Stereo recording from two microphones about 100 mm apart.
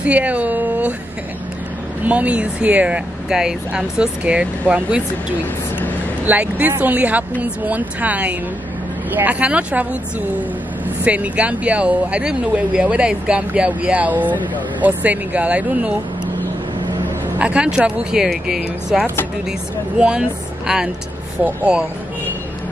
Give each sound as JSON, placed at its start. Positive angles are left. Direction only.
{"t": 0.0, "sound": "speech", "side_deg": -15}
{"t": 2.0, "sound": "speech", "side_deg": -15}
{"t": 6.2, "sound": "speech", "side_deg": -15}
{"t": 11.1, "sound": "speech", "side_deg": -15}
{"t": 17.4, "sound": "speech", "side_deg": -10}